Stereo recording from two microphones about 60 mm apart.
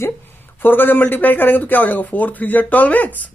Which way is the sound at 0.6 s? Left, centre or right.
Left.